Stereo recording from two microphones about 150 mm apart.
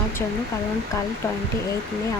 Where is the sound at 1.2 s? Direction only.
15° left (ahead or behind).